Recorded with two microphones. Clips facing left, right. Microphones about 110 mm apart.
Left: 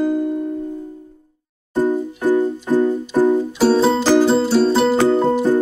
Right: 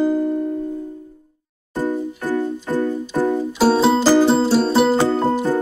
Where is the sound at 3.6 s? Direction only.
5° right (ahead or behind).